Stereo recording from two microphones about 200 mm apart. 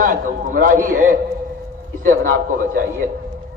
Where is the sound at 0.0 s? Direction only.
45° right (ahead or behind).